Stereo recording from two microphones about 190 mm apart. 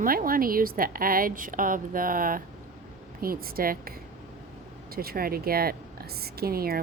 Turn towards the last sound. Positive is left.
turn(degrees=-50)  # may be behind; listen again after turning